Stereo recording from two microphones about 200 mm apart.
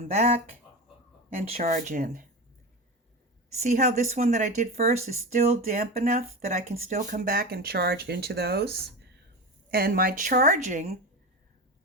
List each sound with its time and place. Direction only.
0.1 s speech: 30° right (ahead or behind)
1.5 s speech: 35° right (ahead or behind)
3.5 s speech: 35° right (ahead or behind); by 8.7 s 55° right (ahead or behind)
9.7 s speech: 50° right (ahead or behind)